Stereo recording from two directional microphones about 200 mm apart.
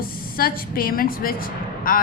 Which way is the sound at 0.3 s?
45° left (ahead or behind).